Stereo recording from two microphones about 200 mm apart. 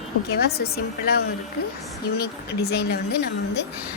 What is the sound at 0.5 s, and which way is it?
Speech, 50° left (ahead or behind).